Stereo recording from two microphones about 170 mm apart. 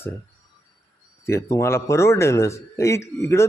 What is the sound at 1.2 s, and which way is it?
Speech, 15° left (ahead or behind).